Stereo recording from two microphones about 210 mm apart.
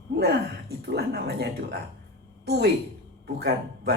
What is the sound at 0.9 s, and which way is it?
A woman's voice, 50° right (ahead or behind).